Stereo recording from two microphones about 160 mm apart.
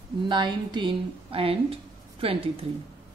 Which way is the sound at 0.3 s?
30° right (ahead or behind).